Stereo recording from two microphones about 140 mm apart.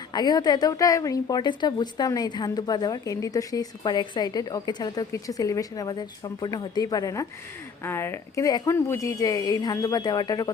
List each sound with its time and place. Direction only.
0.1 s a woman's voice: 30° left (ahead or behind)